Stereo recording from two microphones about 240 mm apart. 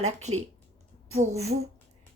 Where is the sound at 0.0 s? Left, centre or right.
Right.